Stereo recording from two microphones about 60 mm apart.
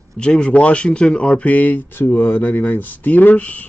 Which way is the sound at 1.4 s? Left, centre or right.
Left.